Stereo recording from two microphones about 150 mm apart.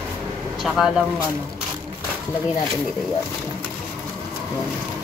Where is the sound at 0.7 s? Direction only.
5° right (ahead or behind).